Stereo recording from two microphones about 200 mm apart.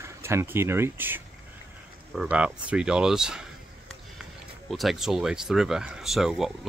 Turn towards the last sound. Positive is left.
turn(degrees=0)  # may be behind; listen again after turning